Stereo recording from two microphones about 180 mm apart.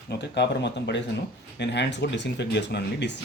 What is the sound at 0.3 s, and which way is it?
Speech, 75° left (ahead or behind).